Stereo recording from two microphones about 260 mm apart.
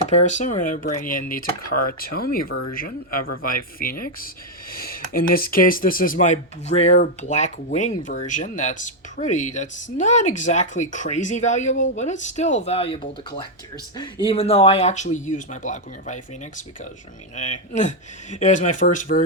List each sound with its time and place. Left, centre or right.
0.1 s speech: left
1.7 s speech: left
2.0 s speech: left
2.5 s speech: left
2.7 s speech: left